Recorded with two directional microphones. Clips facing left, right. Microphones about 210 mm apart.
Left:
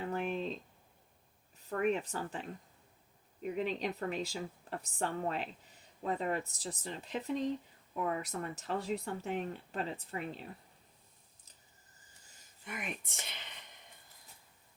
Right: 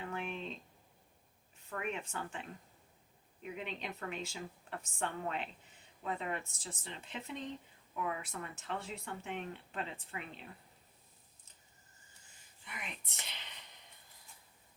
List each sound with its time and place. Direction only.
0.0 s a sound: 35° left (ahead or behind)
1.7 s speech: 40° left (ahead or behind)
12.6 s speech: 50° left (ahead or behind)